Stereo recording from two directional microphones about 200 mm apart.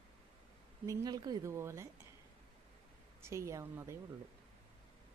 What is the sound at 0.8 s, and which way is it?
Speech, 15° right (ahead or behind).